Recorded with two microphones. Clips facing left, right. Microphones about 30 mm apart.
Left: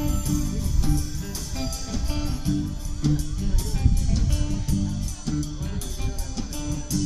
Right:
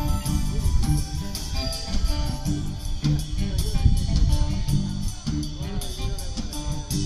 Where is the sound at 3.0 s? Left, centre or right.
Right.